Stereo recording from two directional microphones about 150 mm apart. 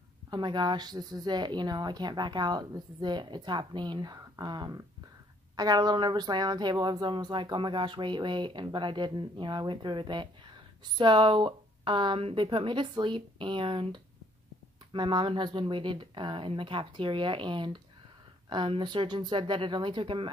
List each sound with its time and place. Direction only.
0.3 s a woman's voice: 30° right (ahead or behind)